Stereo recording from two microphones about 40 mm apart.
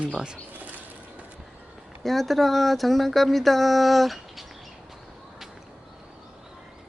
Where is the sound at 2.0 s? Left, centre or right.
Centre.